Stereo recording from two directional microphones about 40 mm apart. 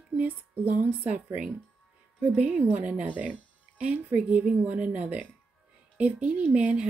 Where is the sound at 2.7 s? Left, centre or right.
Right.